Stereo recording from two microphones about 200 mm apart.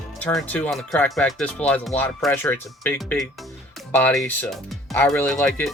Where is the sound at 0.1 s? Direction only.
5° left (ahead or behind).